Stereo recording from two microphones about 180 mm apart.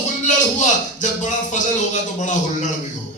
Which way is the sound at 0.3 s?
45° left (ahead or behind).